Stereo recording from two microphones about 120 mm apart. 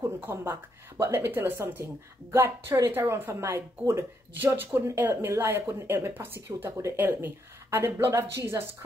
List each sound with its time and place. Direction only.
0.0 s speech: 20° right (ahead or behind)